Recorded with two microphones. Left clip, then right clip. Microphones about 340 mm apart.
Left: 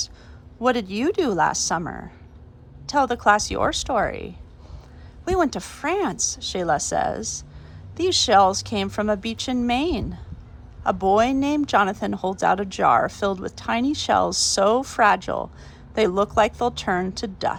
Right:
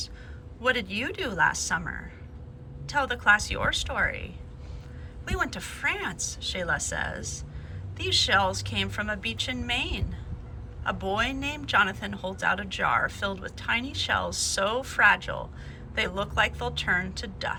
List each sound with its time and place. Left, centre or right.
0.6 s speech: centre